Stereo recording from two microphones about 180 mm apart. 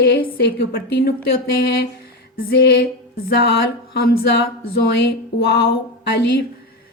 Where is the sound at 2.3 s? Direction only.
60° left (ahead or behind).